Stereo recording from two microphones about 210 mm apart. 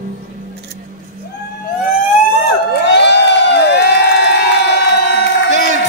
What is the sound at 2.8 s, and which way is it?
Crowd, 55° left (ahead or behind).